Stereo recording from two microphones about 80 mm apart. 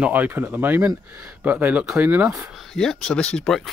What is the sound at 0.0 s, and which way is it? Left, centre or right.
Speech, right.